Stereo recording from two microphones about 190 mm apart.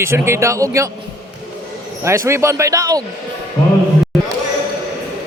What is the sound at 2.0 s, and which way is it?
Speech, 15° right (ahead or behind).